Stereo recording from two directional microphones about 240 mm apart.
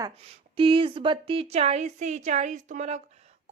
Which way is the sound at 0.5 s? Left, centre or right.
Right.